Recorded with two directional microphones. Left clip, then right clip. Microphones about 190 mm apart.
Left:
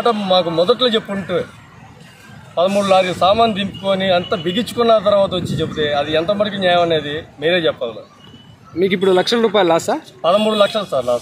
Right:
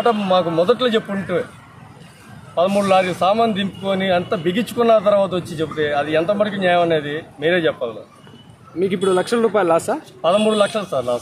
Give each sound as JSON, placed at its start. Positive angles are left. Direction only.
{"t": 0.0, "sound": "speech", "side_deg": 0}
{"t": 2.5, "sound": "speech", "side_deg": 0}
{"t": 8.7, "sound": "speech", "side_deg": 50}
{"t": 10.2, "sound": "a man's voice", "side_deg": -5}